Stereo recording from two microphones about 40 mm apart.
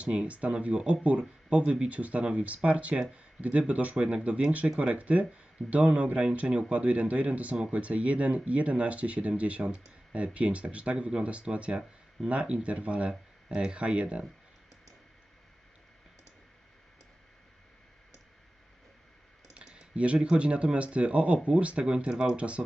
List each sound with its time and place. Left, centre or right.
0.0 s speech: right
19.5 s speech: right